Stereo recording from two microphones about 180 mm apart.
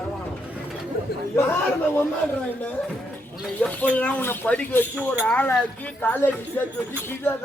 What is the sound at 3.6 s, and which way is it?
Speech, 10° left (ahead or behind).